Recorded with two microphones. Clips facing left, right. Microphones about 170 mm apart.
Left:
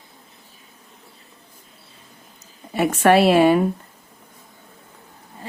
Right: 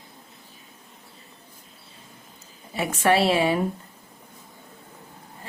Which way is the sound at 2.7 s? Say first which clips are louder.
Left 6 dB; 60° left (ahead or behind).